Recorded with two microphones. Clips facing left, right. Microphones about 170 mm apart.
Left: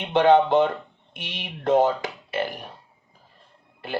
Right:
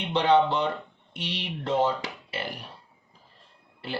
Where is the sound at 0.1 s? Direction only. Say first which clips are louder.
Left 5 dB; 50° left (ahead or behind).